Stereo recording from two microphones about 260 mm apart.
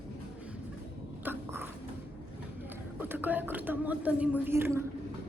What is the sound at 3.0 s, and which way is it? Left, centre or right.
Speech, centre.